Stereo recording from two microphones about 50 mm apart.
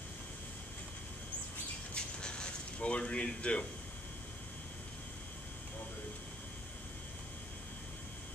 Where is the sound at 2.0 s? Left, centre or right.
Centre.